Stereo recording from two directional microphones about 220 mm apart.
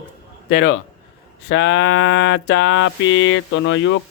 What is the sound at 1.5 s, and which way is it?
Mantra, 55° left (ahead or behind).